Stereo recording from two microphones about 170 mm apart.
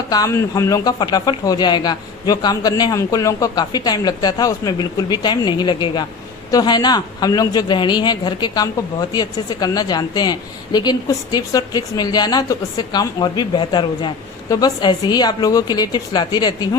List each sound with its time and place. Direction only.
0.1 s a man's voice: 20° left (ahead or behind)